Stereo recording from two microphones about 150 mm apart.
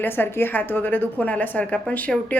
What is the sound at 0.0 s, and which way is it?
A woman's voice, 15° left (ahead or behind).